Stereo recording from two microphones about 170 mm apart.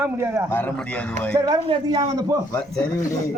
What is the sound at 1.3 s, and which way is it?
Speech, 20° right (ahead or behind).